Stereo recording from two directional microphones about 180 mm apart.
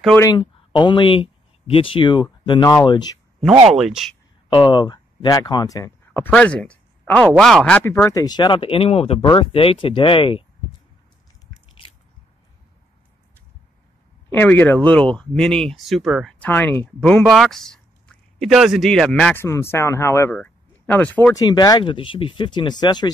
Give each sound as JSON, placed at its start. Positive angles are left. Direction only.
{"t": 0.2, "sound": "speech", "side_deg": 25}
{"t": 3.7, "sound": "speech", "side_deg": 0}
{"t": 4.5, "sound": "speech", "side_deg": 25}
{"t": 14.3, "sound": "speech", "side_deg": 10}
{"t": 21.4, "sound": "speech", "side_deg": 20}